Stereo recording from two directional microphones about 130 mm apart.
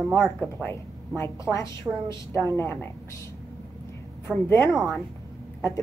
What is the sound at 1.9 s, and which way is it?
Speech, 25° right (ahead or behind).